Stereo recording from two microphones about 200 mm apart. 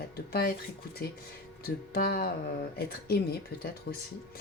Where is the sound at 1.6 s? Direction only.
45° left (ahead or behind).